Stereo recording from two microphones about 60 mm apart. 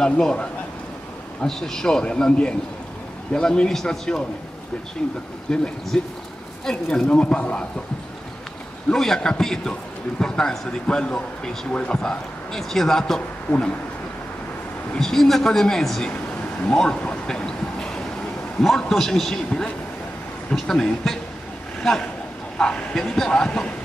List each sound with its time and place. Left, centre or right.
0.0 s a man's voice: centre
5.5 s a man's voice: centre
8.9 s a man's voice: centre
12.0 s a man's voice: centre
15.0 s a man's voice: centre
16.6 s a sound: centre
18.6 s a man's voice: centre